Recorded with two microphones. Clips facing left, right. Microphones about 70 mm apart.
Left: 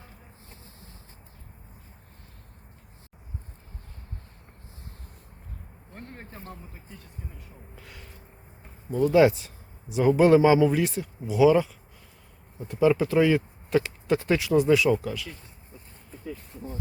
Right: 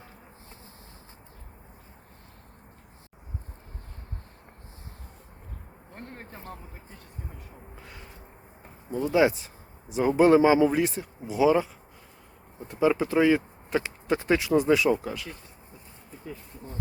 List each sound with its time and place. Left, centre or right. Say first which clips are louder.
7.8 s gasp: right 1 dB; right
9.0 s speech: left 3 dB; centre
9.9 s speech: left 1 dB; right
12.8 s speech: left 1 dB; right